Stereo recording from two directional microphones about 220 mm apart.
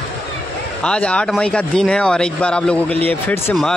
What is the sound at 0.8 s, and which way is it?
Speech, 5° left (ahead or behind).